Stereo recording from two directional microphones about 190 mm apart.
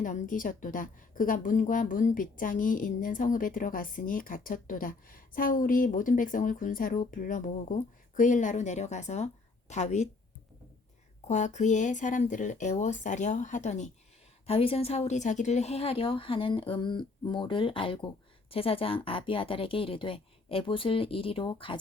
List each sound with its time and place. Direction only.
0.0 s a woman's voice: 45° left (ahead or behind)
11.3 s a woman's voice: 40° left (ahead or behind)